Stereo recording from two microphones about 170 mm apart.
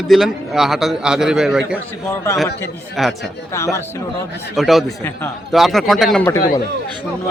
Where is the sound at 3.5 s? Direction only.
15° left (ahead or behind).